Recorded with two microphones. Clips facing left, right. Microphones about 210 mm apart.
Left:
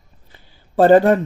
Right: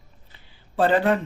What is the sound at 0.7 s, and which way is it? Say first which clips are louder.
Speech: left 8 dB; 45° left (ahead or behind).